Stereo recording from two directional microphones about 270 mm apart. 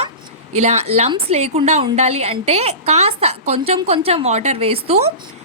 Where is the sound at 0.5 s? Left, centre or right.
Right.